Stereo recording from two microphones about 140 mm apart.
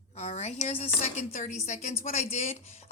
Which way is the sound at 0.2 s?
50° left (ahead or behind).